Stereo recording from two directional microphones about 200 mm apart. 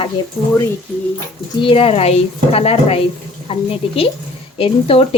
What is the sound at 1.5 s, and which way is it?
A woman's voice, 25° left (ahead or behind).